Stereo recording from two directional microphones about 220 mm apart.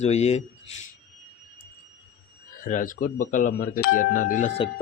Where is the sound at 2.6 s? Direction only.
35° left (ahead or behind).